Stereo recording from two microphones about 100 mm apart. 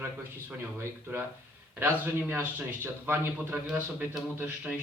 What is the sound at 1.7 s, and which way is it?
A man's voice, 20° right (ahead or behind).